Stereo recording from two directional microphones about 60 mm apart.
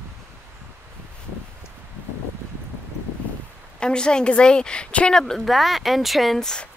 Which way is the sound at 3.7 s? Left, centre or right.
Centre.